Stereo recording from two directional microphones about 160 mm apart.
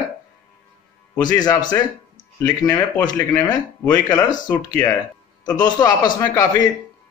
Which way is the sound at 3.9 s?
25° left (ahead or behind).